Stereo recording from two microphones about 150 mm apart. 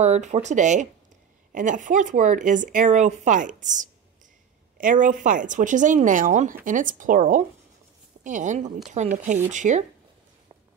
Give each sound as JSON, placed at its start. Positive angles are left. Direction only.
{"t": 0.0, "sound": "speech", "side_deg": -50}